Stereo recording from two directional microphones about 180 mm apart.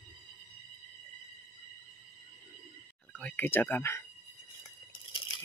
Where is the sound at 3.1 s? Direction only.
10° left (ahead or behind).